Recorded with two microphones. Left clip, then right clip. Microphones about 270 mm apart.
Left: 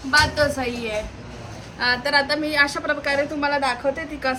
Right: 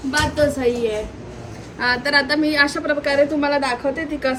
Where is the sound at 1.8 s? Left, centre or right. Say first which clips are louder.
Right 2 dB; centre.